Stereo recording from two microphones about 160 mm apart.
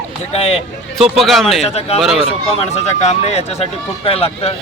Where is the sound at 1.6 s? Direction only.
40° left (ahead or behind).